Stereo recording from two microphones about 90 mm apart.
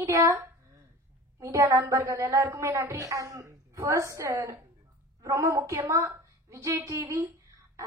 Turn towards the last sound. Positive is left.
turn(degrees=-30)  # may be behind; listen again after turning